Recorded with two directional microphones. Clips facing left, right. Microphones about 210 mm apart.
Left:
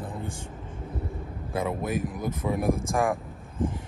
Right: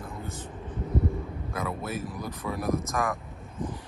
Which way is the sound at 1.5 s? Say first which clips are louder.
Left 5 dB; 30° left (ahead or behind).